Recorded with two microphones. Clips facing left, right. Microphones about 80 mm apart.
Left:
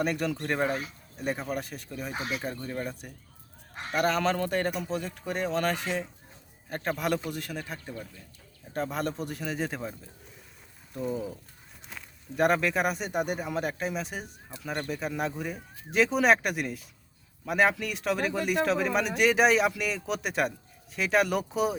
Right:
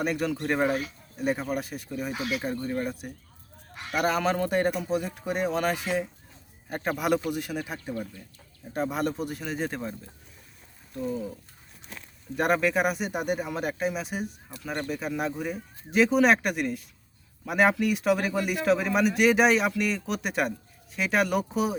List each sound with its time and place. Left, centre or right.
0.0 s speech: centre
2.1 s speech: left
2.4 s speech: centre
10.9 s speech: centre
12.4 s speech: centre